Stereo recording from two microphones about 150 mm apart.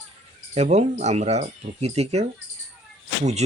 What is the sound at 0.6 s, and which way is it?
Speech, 50° right (ahead or behind).